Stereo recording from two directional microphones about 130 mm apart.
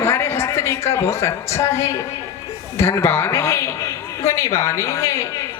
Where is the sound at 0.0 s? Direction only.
20° left (ahead or behind).